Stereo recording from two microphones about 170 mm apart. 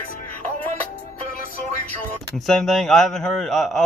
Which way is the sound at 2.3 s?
Centre (ahead or behind).